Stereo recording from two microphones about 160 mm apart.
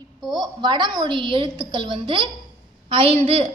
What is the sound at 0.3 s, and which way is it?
A woman's voice, 25° right (ahead or behind).